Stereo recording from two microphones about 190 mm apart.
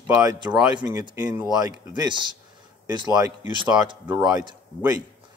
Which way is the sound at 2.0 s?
25° right (ahead or behind).